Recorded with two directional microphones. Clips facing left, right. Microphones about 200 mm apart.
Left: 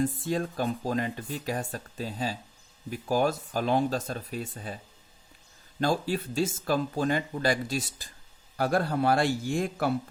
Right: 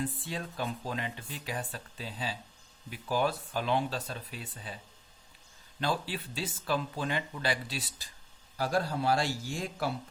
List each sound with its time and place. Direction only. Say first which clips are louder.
0.0 s speech: left 8 dB; 45° left (ahead or behind)
5.8 s a man's voice: left 6 dB; 45° left (ahead or behind)